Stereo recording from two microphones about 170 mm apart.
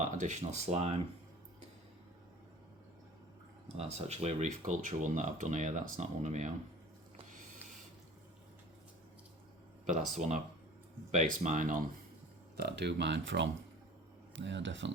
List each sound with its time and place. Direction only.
0.0 s speech: 45° right (ahead or behind)
3.9 s speech: 40° right (ahead or behind)
9.8 s speech: 45° right (ahead or behind)
12.5 s speech: 75° right (ahead or behind); by 14.9 s 90° right